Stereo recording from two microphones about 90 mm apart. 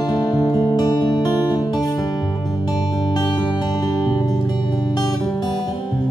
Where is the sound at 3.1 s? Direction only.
50° left (ahead or behind).